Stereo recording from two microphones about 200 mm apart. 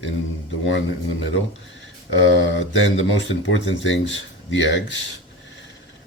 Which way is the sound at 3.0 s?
70° left (ahead or behind).